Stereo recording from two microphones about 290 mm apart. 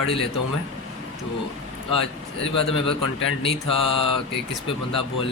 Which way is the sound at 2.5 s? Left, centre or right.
Centre.